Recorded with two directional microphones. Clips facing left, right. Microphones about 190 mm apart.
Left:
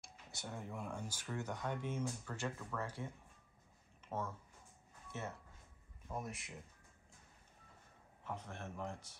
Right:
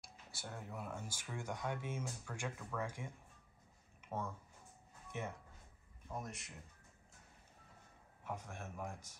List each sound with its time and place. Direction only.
0.4 s speech: centre (ahead or behind)
4.0 s a sound: 10° right (ahead or behind)
5.1 s speech: 15° right (ahead or behind)
6.2 s speech: centre (ahead or behind)
8.2 s speech: 10° right (ahead or behind)